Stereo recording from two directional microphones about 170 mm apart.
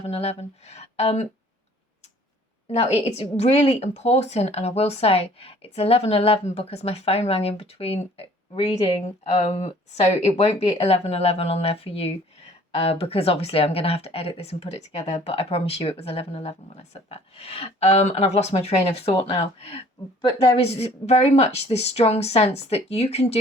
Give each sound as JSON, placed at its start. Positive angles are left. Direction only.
{"t": 0.1, "sound": "speech", "side_deg": 35}
{"t": 2.6, "sound": "speech", "side_deg": 40}